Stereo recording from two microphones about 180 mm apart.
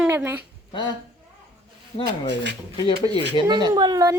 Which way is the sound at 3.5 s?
25° right (ahead or behind).